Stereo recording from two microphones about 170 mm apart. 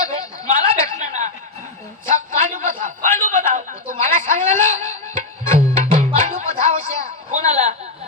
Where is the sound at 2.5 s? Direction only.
50° right (ahead or behind).